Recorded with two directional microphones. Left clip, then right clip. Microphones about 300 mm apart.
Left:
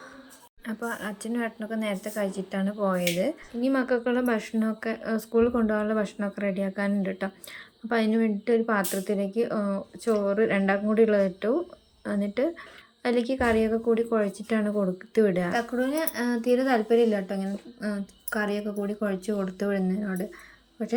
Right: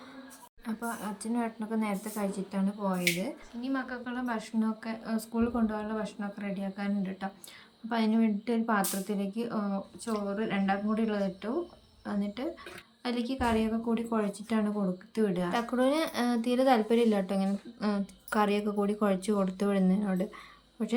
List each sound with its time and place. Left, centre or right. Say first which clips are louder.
0.6 s speech: left 4 dB; centre
15.5 s speech: left 1 dB; centre